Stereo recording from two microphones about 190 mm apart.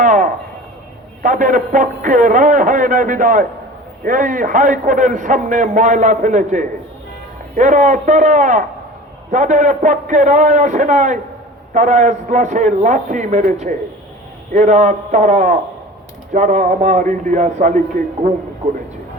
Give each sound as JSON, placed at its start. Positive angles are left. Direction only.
{"t": 0.0, "sound": "a sound", "side_deg": -40}
{"t": 1.2, "sound": "a man's voice", "side_deg": -45}
{"t": 14.5, "sound": "a man's voice", "side_deg": -40}